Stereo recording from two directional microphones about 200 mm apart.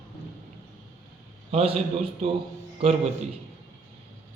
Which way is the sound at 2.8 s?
30° right (ahead or behind).